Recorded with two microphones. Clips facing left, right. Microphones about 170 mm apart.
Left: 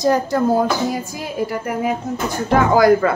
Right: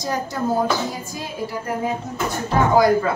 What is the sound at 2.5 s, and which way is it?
Speech, 90° left.